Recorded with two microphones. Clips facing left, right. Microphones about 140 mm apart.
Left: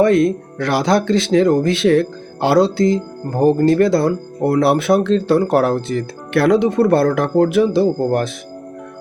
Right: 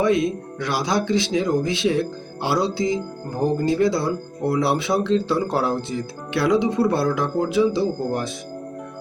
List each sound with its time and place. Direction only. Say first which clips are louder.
0.0 s speech: left 6 dB; 60° left (ahead or behind)